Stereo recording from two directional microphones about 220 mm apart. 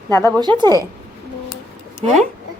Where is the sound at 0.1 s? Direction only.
15° left (ahead or behind).